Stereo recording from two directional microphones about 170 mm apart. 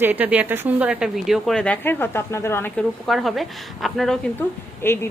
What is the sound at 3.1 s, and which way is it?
A woman's voice, centre (ahead or behind).